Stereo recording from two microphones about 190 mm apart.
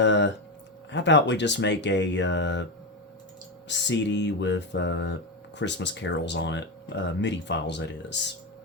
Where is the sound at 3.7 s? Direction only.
65° left (ahead or behind).